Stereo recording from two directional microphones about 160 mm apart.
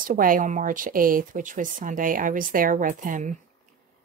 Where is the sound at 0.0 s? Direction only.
60° right (ahead or behind).